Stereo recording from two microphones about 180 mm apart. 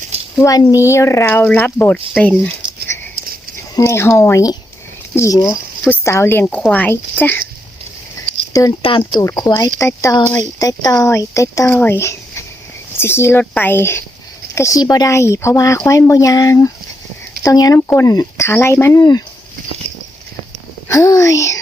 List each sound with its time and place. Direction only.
0.3 s speech: 20° left (ahead or behind)
3.8 s speech: 15° left (ahead or behind)
8.8 s speech: 30° left (ahead or behind)
19.9 s walk: 40° right (ahead or behind)
20.8 s speech: 20° left (ahead or behind)